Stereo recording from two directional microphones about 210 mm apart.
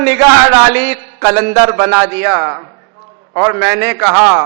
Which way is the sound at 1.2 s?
15° right (ahead or behind).